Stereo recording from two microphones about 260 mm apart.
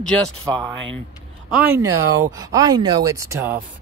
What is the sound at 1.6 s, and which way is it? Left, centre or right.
Speech, centre.